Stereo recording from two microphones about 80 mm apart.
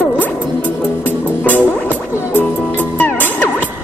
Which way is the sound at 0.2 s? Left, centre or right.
Centre.